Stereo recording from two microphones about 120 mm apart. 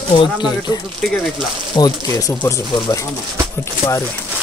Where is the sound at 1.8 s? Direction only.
30° left (ahead or behind).